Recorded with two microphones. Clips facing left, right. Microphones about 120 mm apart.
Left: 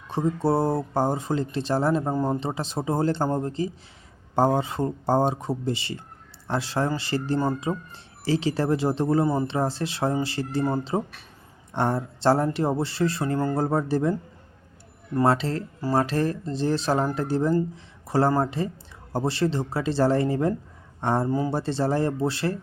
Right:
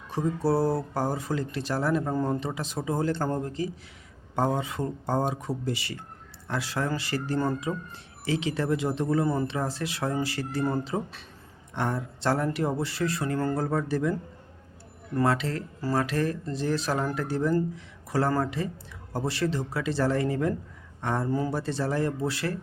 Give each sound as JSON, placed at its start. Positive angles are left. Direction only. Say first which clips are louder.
{"t": 0.1, "sound": "speech", "louder": "left 2 dB", "side_deg": 25}
{"t": 9.2, "sound": "speech", "louder": "left 3 dB", "side_deg": 15}
{"t": 9.5, "sound": "speech", "louder": "left 4 dB", "side_deg": 30}
{"t": 15.2, "sound": "speech", "louder": "left 4 dB", "side_deg": 30}
{"t": 21.2, "sound": "speech", "louder": "left 3 dB", "side_deg": 15}
{"t": 21.5, "sound": "speech", "louder": "left 4 dB", "side_deg": 30}